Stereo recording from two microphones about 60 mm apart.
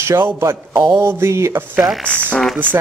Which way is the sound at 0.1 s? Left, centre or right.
Right.